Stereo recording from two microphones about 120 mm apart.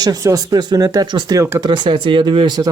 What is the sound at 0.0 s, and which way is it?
Speech, 30° right (ahead or behind).